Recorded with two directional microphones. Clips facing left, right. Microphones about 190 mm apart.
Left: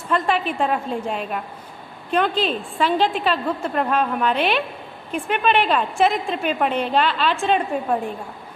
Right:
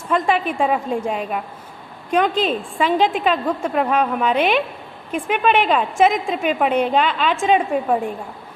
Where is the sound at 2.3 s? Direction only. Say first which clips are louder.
Right 2 dB; 45° right (ahead or behind).